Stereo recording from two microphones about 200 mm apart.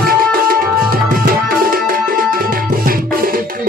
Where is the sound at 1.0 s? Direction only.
45° right (ahead or behind).